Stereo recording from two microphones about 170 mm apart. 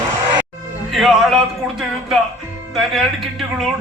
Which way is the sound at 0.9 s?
Centre (ahead or behind).